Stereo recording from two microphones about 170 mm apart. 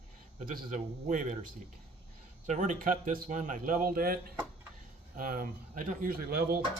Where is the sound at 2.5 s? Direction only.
45° right (ahead or behind).